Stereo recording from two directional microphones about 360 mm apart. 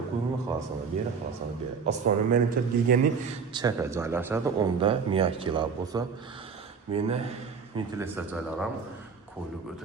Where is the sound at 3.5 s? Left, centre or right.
Centre.